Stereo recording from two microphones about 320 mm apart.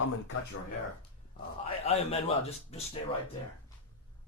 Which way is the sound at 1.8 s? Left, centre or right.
Centre.